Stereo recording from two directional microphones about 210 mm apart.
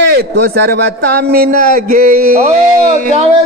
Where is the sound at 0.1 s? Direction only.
50° right (ahead or behind).